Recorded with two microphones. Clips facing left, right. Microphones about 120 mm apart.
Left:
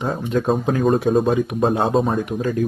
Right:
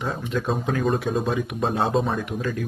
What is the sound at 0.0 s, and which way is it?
Speech, 40° left (ahead or behind).